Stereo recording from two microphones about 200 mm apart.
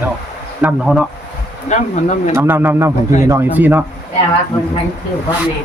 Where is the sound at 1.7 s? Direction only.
35° left (ahead or behind).